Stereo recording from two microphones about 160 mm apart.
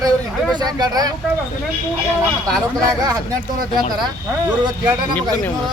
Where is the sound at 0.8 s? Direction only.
25° right (ahead or behind).